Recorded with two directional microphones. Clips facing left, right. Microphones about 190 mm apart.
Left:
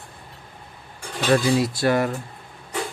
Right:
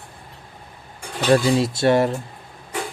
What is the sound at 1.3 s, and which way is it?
Speech, 25° right (ahead or behind).